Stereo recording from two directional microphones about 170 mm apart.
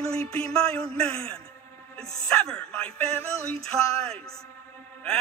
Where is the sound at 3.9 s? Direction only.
35° right (ahead or behind).